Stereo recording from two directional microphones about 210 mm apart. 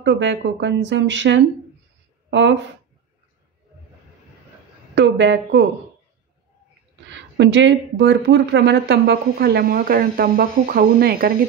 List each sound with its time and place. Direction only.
0.0 s speech: 55° right (ahead or behind)
4.9 s speech: 60° right (ahead or behind)
7.1 s speech: 60° right (ahead or behind)